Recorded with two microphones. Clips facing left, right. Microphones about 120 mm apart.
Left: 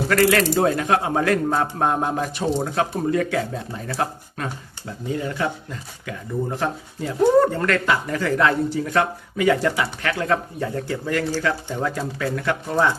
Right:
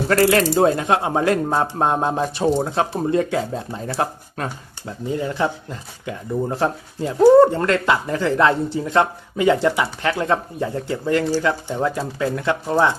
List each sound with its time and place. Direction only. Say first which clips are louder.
0.1 s speech: right 2 dB; 30° right (ahead or behind)
6.6 s speech: right 4 dB; 30° right (ahead or behind)